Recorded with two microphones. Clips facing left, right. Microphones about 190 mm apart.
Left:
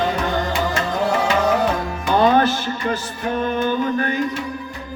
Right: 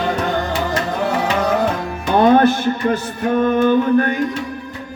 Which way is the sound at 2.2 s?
55° right (ahead or behind).